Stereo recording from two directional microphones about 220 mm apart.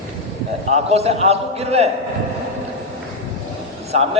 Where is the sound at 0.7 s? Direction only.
30° right (ahead or behind).